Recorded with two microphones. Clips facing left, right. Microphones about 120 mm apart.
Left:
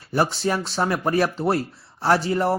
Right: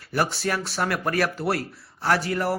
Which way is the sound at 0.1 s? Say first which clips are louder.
Left 3 dB; 25° left (ahead or behind).